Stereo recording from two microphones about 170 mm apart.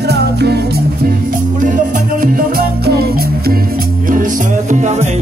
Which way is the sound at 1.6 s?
50° right (ahead or behind).